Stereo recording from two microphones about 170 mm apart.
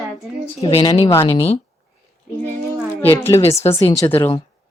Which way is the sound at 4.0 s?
10° left (ahead or behind).